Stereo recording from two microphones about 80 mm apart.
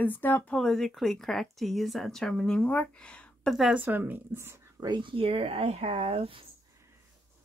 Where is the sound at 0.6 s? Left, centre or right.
Centre.